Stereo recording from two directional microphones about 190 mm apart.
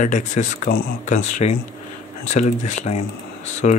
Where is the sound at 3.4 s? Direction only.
35° left (ahead or behind).